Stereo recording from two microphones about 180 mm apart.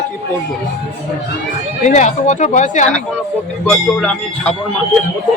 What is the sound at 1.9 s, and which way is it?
Speech, 40° left (ahead or behind).